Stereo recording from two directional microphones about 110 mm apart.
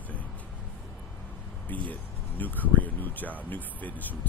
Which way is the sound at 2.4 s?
15° left (ahead or behind).